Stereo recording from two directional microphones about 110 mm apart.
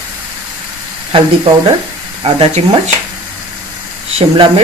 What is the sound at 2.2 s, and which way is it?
Speech, 70° right (ahead or behind).